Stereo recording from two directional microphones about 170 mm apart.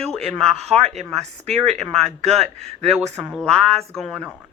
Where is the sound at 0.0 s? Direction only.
5° left (ahead or behind).